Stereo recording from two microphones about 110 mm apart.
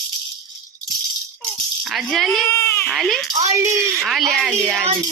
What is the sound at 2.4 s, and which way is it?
Speech, 25° left (ahead or behind).